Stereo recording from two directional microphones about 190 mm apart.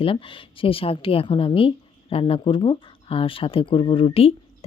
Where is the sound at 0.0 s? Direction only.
30° left (ahead or behind).